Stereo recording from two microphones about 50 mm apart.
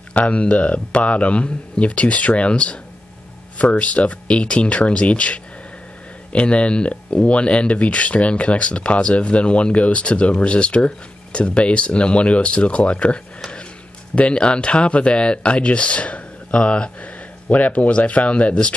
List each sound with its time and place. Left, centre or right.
0.1 s speech: left